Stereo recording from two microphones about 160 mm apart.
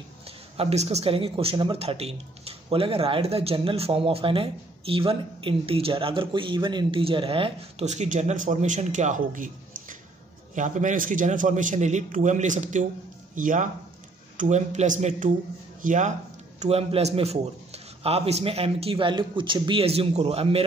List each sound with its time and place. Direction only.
0.6 s a man's voice: 40° right (ahead or behind)
16.5 s speech: 40° right (ahead or behind)